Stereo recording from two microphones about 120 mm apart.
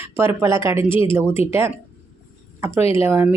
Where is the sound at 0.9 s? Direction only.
45° left (ahead or behind).